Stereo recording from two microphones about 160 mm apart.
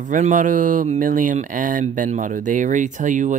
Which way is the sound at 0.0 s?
55° right (ahead or behind).